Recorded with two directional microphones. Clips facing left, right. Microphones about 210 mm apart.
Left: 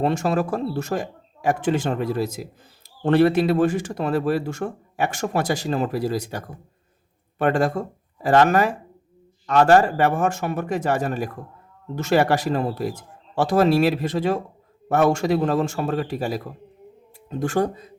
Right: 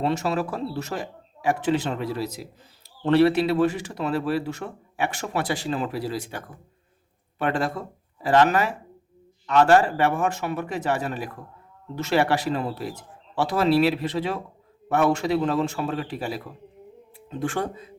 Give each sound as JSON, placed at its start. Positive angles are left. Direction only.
{"t": 0.0, "sound": "speech", "side_deg": 45}